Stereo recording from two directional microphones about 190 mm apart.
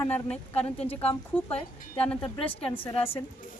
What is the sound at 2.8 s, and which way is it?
Speech, 30° left (ahead or behind).